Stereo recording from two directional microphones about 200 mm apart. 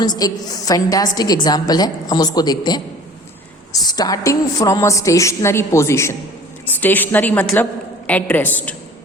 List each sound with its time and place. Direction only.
0.2 s a woman's voice: 20° left (ahead or behind)